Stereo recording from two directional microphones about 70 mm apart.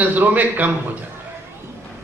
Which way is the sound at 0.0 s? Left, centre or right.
Right.